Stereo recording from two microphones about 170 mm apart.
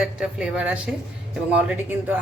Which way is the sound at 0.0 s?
5° right (ahead or behind).